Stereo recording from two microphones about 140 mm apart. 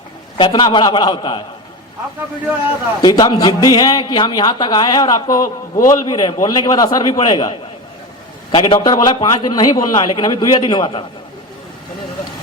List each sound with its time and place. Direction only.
0.3 s a man's voice: 35° left (ahead or behind)
3.0 s a man's voice: 30° left (ahead or behind)
8.6 s a man's voice: 30° left (ahead or behind)